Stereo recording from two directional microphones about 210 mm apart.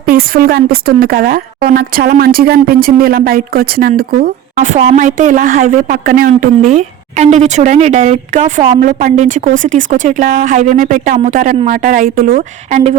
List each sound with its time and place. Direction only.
0.0 s speech: 45° right (ahead or behind)